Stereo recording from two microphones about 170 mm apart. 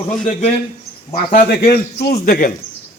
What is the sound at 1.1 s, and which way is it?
A man's voice, 55° left (ahead or behind).